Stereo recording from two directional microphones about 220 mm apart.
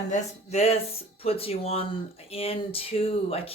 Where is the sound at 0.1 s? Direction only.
30° left (ahead or behind).